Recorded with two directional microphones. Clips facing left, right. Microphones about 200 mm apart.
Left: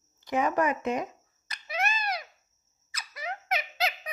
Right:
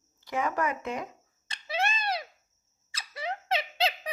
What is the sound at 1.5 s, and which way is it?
Babbling, 30° right (ahead or behind).